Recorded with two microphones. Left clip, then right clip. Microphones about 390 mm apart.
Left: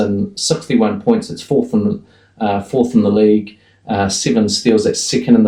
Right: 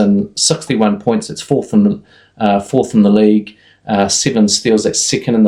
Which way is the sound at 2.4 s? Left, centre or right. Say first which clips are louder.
Right 3 dB; right.